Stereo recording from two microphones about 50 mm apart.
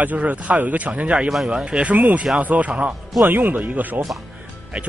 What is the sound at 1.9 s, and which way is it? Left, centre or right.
Speech, right.